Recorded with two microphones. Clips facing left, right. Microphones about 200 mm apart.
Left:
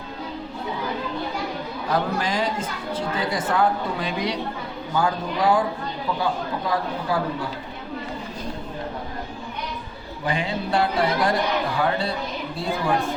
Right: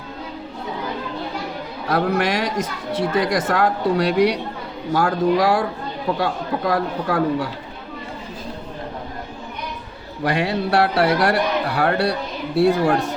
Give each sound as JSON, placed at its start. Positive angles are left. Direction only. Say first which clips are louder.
{"t": 1.9, "sound": "a man's voice", "louder": "right 5 dB", "side_deg": -70}
{"t": 10.2, "sound": "a man's voice", "louder": "right 5 dB", "side_deg": -75}